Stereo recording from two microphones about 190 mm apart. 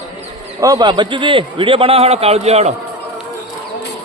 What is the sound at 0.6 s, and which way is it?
A man's voice, 20° right (ahead or behind).